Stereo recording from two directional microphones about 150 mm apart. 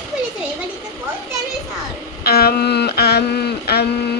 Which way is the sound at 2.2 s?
90° left.